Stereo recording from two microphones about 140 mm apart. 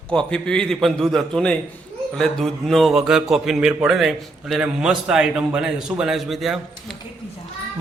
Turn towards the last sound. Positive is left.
turn(degrees=0)  # may be behind; listen again after turning